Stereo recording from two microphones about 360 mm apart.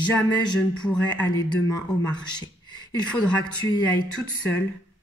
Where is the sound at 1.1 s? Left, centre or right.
Centre.